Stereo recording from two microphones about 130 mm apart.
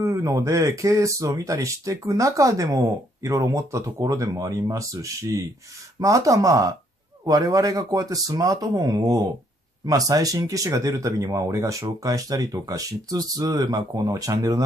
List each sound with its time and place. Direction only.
0.0 s speech: 25° right (ahead or behind)